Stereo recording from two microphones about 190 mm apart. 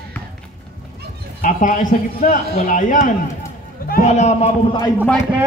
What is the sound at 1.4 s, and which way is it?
A man's voice, 45° left (ahead or behind).